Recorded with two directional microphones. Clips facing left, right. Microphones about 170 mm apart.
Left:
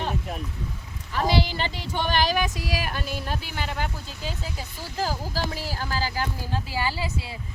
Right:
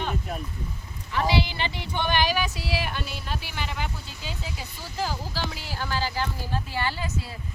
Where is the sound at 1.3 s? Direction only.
45° left (ahead or behind).